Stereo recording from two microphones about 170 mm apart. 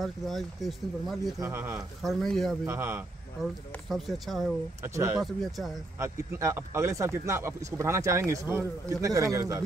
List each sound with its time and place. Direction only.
0.0 s speech: centre (ahead or behind)
1.4 s speech: 15° right (ahead or behind)
2.0 s speech: centre (ahead or behind)
2.6 s speech: 15° right (ahead or behind)
3.4 s speech: centre (ahead or behind)
4.8 s speech: 15° right (ahead or behind)
5.2 s speech: centre (ahead or behind)
5.9 s speech: 15° right (ahead or behind)